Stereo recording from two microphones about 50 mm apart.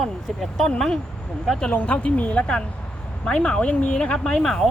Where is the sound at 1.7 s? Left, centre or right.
Left.